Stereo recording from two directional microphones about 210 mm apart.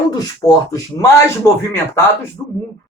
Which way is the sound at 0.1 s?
15° left (ahead or behind).